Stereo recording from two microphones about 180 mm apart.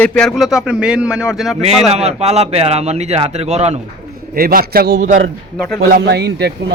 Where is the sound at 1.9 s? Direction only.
35° right (ahead or behind).